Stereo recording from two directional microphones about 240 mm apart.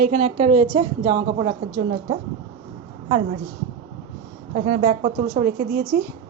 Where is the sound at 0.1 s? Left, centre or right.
Right.